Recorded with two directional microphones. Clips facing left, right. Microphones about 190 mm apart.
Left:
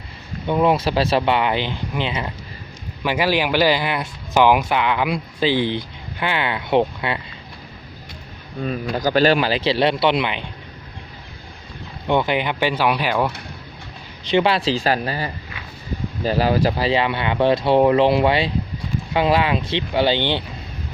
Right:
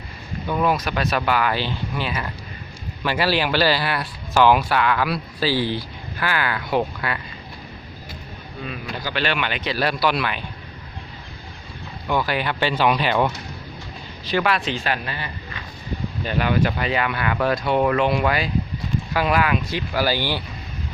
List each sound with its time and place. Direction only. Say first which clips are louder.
0.4 s speech: left 4 dB; 25° left (ahead or behind)
8.6 s speech: left 9 dB; 40° left (ahead or behind); by 10.4 s 20° left (ahead or behind)
12.0 s speech: left 3 dB; 25° left (ahead or behind); by 13.2 s 10° left (ahead or behind)
14.3 s speech: left 4 dB; 25° left (ahead or behind)